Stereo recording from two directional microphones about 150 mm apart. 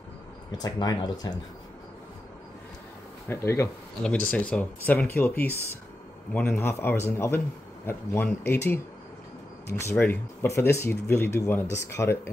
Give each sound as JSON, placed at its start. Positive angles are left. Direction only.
{"t": 0.6, "sound": "speech", "side_deg": 25}
{"t": 3.3, "sound": "a man's voice", "side_deg": 20}